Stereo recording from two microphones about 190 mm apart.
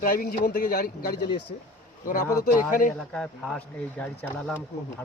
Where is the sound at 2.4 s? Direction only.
45° left (ahead or behind).